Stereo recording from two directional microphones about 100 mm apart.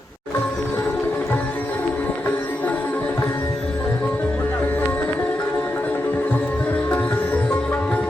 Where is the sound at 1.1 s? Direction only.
15° left (ahead or behind).